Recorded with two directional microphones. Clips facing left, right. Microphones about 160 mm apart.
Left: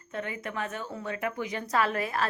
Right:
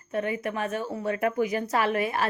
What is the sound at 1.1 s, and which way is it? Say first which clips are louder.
Speech: right 7 dB; 35° right (ahead or behind).